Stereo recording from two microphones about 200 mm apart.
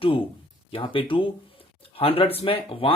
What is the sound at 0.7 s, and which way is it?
Speech, 25° left (ahead or behind).